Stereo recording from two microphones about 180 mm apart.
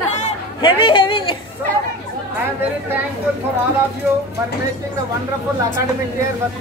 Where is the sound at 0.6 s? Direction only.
25° left (ahead or behind).